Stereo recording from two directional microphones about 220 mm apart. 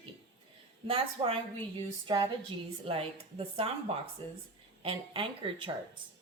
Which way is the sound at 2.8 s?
25° right (ahead or behind).